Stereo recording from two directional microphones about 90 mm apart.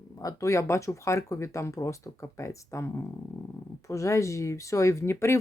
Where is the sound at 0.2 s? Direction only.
40° left (ahead or behind).